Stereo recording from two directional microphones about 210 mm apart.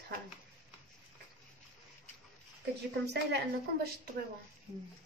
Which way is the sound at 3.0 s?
50° right (ahead or behind).